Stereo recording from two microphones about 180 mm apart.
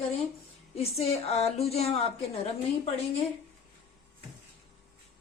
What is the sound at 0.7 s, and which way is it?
Speech, 35° left (ahead or behind).